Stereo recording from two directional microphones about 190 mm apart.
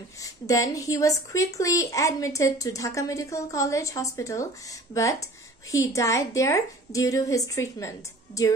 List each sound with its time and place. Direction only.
0.2 s a woman's voice: 15° left (ahead or behind)